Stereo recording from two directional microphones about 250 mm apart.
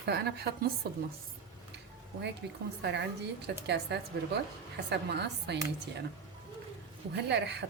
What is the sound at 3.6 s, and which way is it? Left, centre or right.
A woman's voice, right.